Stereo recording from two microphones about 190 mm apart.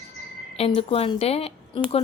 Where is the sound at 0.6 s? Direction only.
30° left (ahead or behind).